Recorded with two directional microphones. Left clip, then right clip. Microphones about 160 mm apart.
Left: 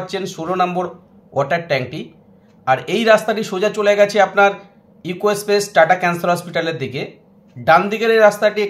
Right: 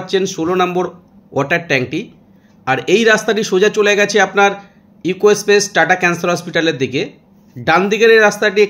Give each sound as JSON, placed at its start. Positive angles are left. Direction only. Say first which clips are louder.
{"t": 0.0, "sound": "speech", "louder": "right 7 dB", "side_deg": -30}